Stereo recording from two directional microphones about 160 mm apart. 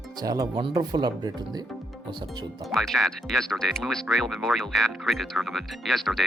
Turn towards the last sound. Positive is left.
turn(degrees=0)  # may be behind; listen again after turning